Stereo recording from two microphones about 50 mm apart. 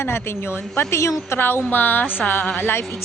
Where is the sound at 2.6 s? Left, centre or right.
Left.